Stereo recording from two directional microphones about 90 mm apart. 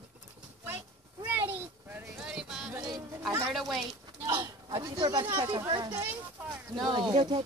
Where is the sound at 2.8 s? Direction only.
50° right (ahead or behind).